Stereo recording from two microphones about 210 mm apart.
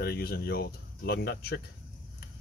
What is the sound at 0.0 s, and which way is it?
Speech, 50° left (ahead or behind).